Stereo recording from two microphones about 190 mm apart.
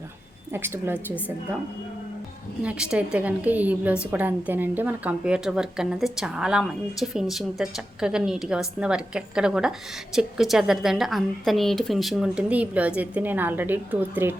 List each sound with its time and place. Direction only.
0.5 s a woman's voice: 10° right (ahead or behind)
2.6 s a woman's voice: 5° right (ahead or behind)